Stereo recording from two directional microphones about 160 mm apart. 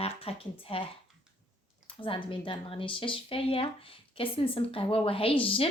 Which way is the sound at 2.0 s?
30° left (ahead or behind).